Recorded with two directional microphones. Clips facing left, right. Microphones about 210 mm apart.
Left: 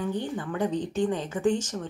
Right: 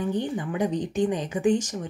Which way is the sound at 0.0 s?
15° right (ahead or behind).